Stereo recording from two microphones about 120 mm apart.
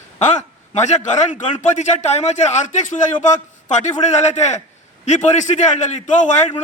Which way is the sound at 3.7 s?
75° left (ahead or behind).